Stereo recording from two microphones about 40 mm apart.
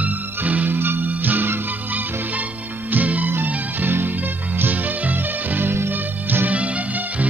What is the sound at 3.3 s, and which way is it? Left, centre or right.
Music, right.